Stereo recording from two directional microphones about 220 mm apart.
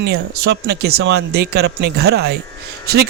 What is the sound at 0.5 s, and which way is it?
Speech, 50° right (ahead or behind).